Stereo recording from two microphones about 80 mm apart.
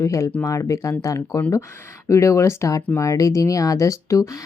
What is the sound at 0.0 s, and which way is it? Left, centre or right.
A woman's voice, left.